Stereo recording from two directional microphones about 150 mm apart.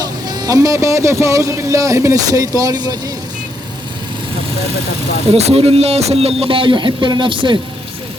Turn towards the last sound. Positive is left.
turn(degrees=-35)  # may be behind; listen again after turning